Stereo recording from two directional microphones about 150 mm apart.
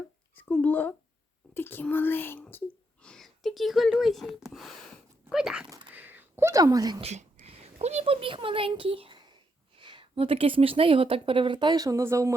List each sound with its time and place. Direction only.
0.3 s speech: 10° left (ahead or behind)
5.9 s a sound: 10° right (ahead or behind)
7.0 s speech: 50° right (ahead or behind); by 12.3 s 20° right (ahead or behind)